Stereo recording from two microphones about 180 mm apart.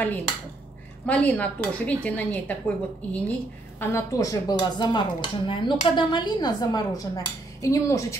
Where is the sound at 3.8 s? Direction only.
15° left (ahead or behind).